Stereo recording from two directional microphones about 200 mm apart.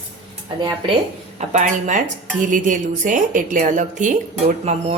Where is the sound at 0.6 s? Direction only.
20° right (ahead or behind).